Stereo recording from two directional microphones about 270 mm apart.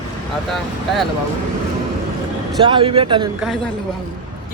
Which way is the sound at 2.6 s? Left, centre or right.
Centre.